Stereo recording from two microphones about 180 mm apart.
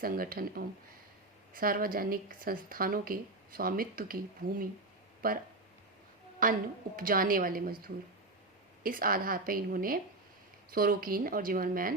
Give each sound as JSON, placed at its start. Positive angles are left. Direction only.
{"t": 0.0, "sound": "speech", "side_deg": -55}
{"t": 6.4, "sound": "speech", "side_deg": -50}
{"t": 8.8, "sound": "speech", "side_deg": -50}